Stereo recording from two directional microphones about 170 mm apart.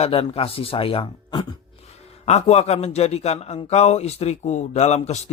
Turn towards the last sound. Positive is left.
turn(degrees=40)  # may be behind; listen again after turning